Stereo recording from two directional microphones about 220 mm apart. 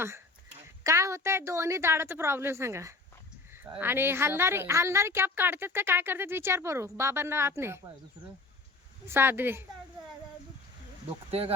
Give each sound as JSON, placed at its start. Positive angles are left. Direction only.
{"t": 0.9, "sound": "a woman's voice", "side_deg": -15}
{"t": 9.0, "sound": "a woman's voice", "side_deg": -10}
{"t": 11.3, "sound": "speech", "side_deg": -25}